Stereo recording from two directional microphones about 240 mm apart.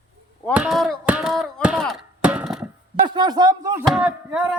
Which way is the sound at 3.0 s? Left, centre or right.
Centre.